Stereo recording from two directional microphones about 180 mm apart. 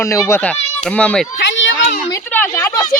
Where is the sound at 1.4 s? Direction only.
85° left.